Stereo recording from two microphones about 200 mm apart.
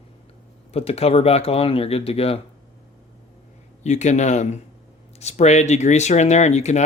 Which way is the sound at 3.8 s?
35° left (ahead or behind).